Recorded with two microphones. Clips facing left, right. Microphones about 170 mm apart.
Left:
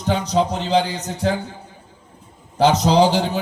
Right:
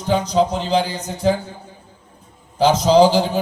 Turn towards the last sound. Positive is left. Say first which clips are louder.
# right 3 dB
turn(degrees=65)  # may be behind; listen again after turning